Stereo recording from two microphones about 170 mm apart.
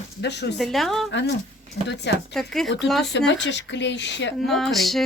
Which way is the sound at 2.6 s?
90° left.